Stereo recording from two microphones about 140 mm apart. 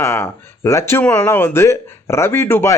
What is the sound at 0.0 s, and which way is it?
Speech, 20° left (ahead or behind).